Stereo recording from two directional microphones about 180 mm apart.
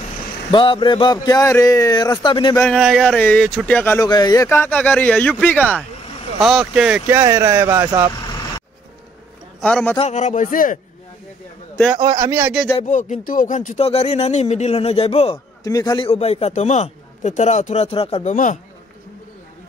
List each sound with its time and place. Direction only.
0.5 s speech: 25° left (ahead or behind)
2.6 s a man's voice: centre (ahead or behind)
6.4 s speech: centre (ahead or behind)
7.1 s speech: 15° right (ahead or behind)
9.6 s a man's voice: 5° left (ahead or behind)
9.9 s a man's voice: 40° left (ahead or behind)
12.0 s speech: 20° right (ahead or behind)
12.8 s speech: 45° left (ahead or behind)
15.6 s speech: 20° left (ahead or behind)
16.1 s speech: 35° left (ahead or behind)